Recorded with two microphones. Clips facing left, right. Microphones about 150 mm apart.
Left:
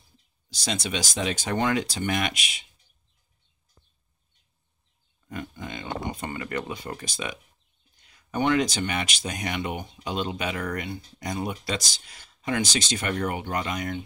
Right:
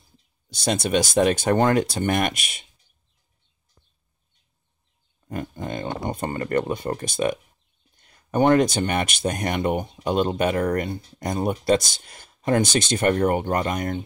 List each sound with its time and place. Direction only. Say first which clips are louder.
0.5 s speech: right 7 dB; 55° right (ahead or behind)
5.3 s speech: right 6 dB; 45° right (ahead or behind)